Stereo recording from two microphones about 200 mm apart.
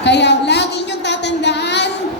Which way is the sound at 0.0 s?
60° left (ahead or behind).